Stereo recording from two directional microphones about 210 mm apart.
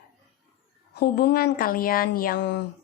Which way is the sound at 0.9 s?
50° left (ahead or behind).